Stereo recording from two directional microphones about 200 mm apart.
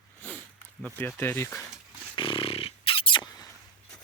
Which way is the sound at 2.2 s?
25° left (ahead or behind).